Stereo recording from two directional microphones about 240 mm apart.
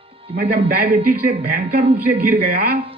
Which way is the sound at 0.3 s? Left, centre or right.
Right.